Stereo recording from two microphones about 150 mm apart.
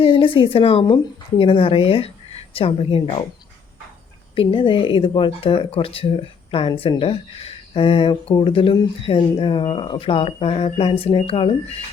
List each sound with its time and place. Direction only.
0.0 s a woman's voice: 35° left (ahead or behind)
4.4 s speech: 35° left (ahead or behind)